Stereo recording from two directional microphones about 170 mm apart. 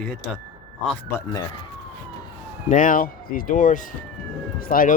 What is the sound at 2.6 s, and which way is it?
Speech, 50° left (ahead or behind).